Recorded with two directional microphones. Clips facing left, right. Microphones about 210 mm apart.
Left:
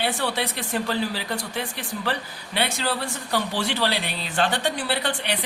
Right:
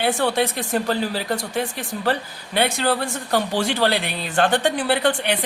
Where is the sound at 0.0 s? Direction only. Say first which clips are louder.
Right 6 dB; 50° right (ahead or behind).